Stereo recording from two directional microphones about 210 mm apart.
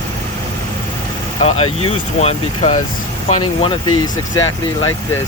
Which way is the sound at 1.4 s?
30° left (ahead or behind).